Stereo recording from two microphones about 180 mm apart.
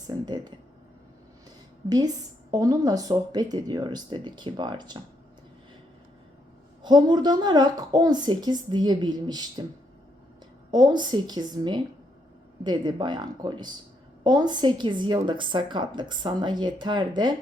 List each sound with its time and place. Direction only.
0.1 s a woman's voice: 20° right (ahead or behind)
2.5 s a woman's voice: 20° right (ahead or behind)
6.8 s a woman's voice: 25° right (ahead or behind)
10.7 s a woman's voice: 25° right (ahead or behind)